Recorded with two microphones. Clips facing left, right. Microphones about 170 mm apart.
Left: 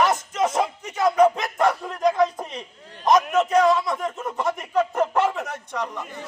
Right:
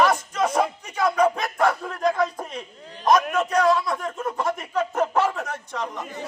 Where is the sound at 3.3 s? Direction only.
5° left (ahead or behind).